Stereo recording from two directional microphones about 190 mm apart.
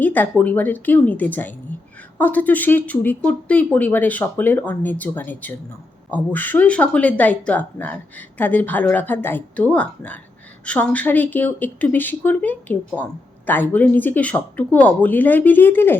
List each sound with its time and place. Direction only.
0.0 s speech: 10° left (ahead or behind)